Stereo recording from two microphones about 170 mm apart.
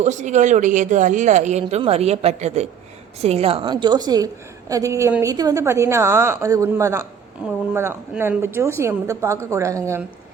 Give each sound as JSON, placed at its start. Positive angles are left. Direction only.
{"t": 0.0, "sound": "a woman's voice", "side_deg": -45}